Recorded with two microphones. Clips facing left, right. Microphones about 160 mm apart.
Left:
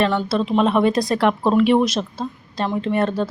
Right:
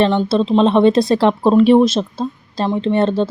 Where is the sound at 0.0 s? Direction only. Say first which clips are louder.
Right 5 dB; 25° right (ahead or behind).